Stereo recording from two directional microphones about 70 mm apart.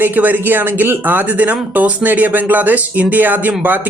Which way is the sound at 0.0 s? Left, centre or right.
Right.